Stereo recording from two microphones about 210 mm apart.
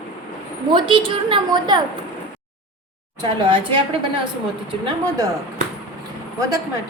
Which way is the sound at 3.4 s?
25° right (ahead or behind).